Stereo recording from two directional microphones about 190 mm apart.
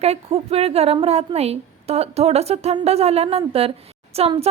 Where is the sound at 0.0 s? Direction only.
30° right (ahead or behind).